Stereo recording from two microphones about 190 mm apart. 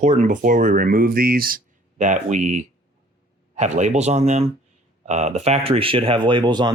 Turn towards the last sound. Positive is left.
turn(degrees=-25)  # may be behind; listen again after turning